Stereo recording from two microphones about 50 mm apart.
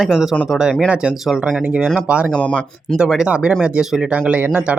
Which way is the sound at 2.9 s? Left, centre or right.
Centre.